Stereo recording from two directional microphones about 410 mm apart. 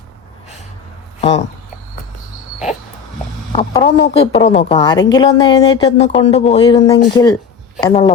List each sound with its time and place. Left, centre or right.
1.2 s speech: centre
3.5 s a woman's voice: centre